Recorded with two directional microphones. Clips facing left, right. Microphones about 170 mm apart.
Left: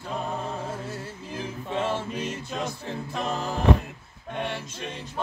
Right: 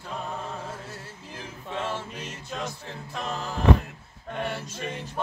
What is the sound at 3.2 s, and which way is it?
Music, 5° left (ahead or behind).